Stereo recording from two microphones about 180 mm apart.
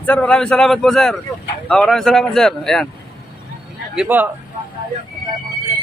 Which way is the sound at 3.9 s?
5° right (ahead or behind).